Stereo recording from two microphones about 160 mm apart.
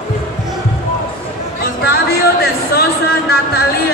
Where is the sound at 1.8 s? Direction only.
75° left (ahead or behind).